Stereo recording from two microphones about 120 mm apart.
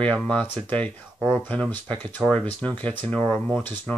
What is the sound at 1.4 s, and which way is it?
Speech, 15° left (ahead or behind).